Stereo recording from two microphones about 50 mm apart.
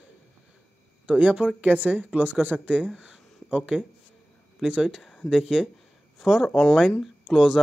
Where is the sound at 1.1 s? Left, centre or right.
Right.